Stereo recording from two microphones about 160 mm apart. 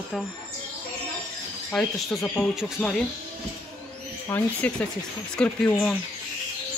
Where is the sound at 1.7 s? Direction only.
5° left (ahead or behind).